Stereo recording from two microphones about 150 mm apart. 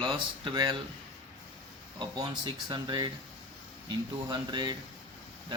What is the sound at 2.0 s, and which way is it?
Speech, 30° right (ahead or behind).